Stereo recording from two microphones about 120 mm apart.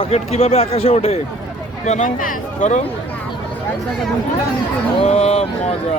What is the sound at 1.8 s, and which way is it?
Speech, 75° left (ahead or behind).